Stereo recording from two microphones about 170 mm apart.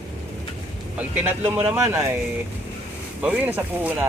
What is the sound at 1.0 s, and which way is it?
Speech, 10° right (ahead or behind).